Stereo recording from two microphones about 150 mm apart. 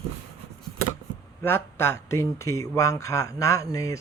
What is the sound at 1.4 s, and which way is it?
Speech, 15° left (ahead or behind).